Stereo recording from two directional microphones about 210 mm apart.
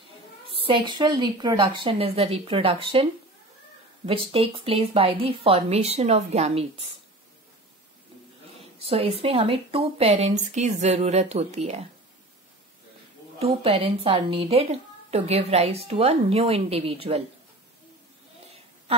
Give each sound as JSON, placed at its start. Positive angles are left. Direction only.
{"t": 0.5, "sound": "a woman's voice", "side_deg": -25}
{"t": 8.8, "sound": "a woman's voice", "side_deg": -30}
{"t": 13.4, "sound": "a woman's voice", "side_deg": -25}